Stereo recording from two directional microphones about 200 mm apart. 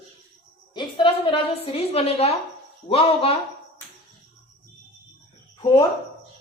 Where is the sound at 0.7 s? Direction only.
25° left (ahead or behind).